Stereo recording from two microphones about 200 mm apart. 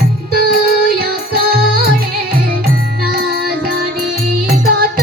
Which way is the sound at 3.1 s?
50° right (ahead or behind).